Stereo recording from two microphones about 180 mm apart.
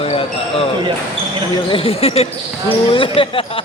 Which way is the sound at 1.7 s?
30° left (ahead or behind).